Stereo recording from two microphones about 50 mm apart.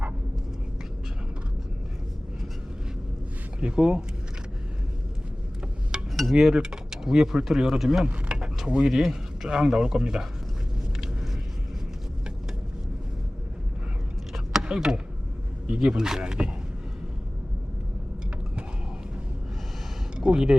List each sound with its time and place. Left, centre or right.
3.6 s speech: centre
5.9 s a sound: centre
6.3 s speech: centre
8.0 s speech: right
8.4 s speech: centre
14.3 s a sound: centre
15.7 s speech: centre
20.1 s speech: centre